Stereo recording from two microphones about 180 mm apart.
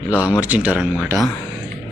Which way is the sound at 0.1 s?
10° left (ahead or behind).